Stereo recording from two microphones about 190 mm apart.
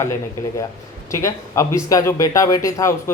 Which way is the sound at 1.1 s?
15° left (ahead or behind).